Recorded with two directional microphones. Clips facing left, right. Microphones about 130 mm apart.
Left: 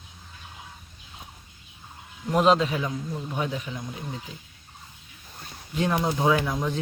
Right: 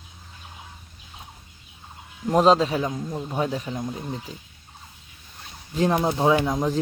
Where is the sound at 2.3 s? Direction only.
35° right (ahead or behind).